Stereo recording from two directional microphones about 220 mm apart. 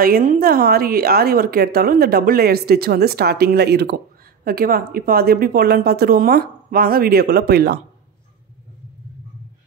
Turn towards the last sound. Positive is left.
turn(degrees=-45)  # may be behind; listen again after turning